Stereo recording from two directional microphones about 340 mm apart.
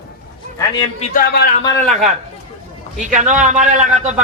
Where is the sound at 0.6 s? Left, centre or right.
Centre.